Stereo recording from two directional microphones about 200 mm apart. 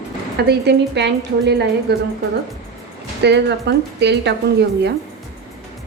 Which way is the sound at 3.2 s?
60° right (ahead or behind).